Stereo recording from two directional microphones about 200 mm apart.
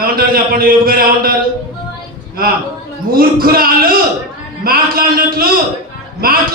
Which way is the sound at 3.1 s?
45° right (ahead or behind).